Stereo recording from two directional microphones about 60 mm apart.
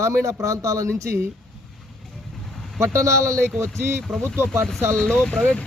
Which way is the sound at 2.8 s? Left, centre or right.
Right.